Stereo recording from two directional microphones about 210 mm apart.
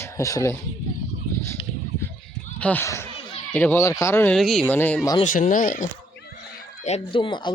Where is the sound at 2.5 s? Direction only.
5° left (ahead or behind).